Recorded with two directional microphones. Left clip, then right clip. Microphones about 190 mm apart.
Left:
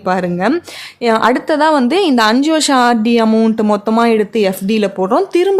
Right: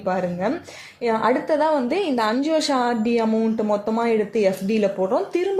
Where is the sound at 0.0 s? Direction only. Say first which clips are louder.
Left 8 dB; 25° left (ahead or behind).